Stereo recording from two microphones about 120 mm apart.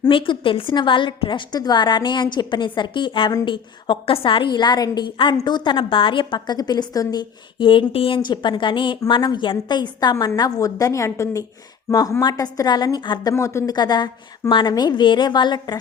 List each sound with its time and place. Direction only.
0.1 s a woman's voice: 45° left (ahead or behind)
13.3 s speech: 25° left (ahead or behind)
13.7 s a woman's voice: 35° left (ahead or behind)